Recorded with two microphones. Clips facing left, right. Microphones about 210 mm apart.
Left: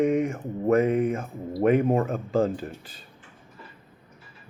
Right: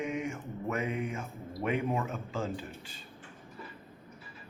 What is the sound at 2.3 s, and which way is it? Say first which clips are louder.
Speech: left 12 dB; 55° left (ahead or behind).